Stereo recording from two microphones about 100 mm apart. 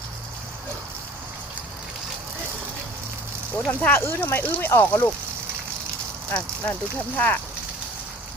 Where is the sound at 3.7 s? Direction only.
20° left (ahead or behind).